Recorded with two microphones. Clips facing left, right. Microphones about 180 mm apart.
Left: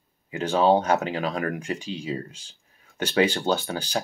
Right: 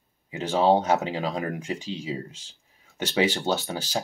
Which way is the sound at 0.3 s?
20° right (ahead or behind).